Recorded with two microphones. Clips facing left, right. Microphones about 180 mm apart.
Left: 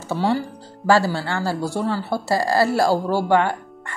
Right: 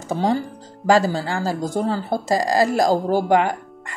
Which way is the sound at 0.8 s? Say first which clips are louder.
Right 1 dB; 20° right (ahead or behind).